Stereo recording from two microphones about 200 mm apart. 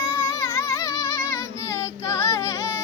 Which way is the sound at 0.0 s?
15° left (ahead or behind).